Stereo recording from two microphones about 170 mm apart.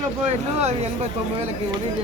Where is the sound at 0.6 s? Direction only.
40° right (ahead or behind).